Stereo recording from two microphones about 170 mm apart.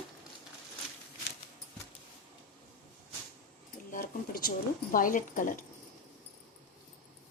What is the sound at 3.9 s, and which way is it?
Speech, 60° left (ahead or behind).